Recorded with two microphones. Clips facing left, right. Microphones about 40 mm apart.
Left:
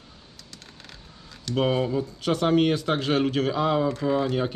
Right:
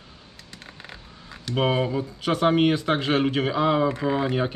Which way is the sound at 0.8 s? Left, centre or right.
Right.